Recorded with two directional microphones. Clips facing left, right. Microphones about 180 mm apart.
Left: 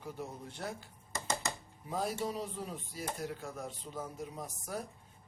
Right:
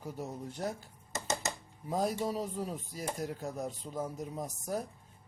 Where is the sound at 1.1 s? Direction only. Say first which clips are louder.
Right 1 dB; 20° right (ahead or behind).